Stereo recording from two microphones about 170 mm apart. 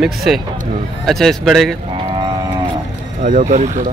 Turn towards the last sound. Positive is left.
turn(degrees=-50)  # may be behind; listen again after turning